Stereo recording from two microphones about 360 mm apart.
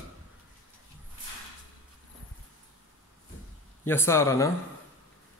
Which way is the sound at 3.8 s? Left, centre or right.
Centre.